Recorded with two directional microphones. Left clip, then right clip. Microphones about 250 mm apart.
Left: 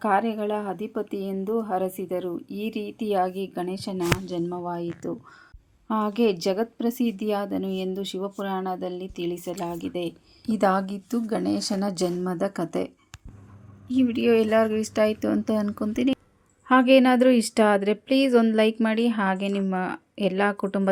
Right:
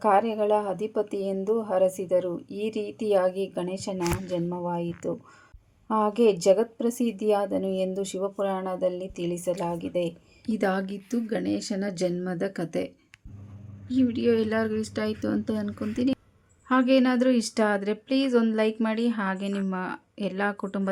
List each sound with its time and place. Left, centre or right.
0.0 s speech: left
2.5 s speech: left
3.1 s speech: left
10.4 s a woman's voice: centre
16.6 s speech: centre